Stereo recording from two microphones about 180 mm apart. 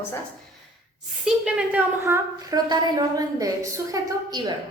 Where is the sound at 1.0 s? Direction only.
Centre (ahead or behind); by 4.5 s 25° right (ahead or behind).